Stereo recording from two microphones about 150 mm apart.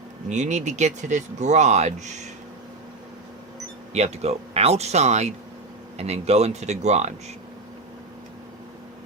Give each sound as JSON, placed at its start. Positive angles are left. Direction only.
{"t": 0.3, "sound": "speech", "side_deg": -50}
{"t": 3.9, "sound": "speech", "side_deg": -45}